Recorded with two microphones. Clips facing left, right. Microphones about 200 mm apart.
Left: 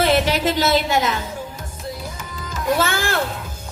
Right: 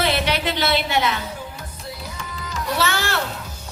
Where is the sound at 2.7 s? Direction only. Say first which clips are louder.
Left 2 dB; 50° left (ahead or behind).